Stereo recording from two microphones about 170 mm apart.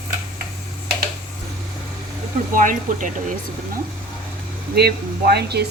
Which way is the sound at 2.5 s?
50° right (ahead or behind).